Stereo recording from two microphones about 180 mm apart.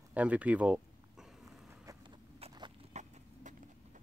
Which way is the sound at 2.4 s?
35° right (ahead or behind).